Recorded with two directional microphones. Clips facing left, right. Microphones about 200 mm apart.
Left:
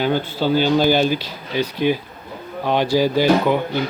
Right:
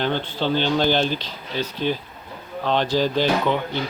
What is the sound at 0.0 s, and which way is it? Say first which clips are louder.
Speech: left 4 dB; 10° left (ahead or behind).